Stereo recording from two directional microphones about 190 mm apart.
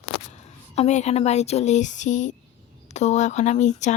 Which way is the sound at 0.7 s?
35° left (ahead or behind).